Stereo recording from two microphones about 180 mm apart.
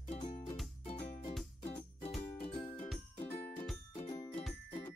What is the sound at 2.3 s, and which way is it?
Music, 45° left (ahead or behind).